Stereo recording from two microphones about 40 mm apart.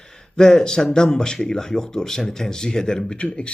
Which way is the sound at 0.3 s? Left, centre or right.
Centre.